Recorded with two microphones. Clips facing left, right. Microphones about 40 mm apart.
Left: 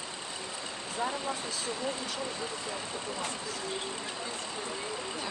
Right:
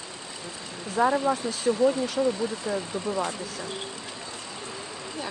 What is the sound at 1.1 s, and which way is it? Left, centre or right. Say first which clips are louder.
Speech: right 10 dB; right.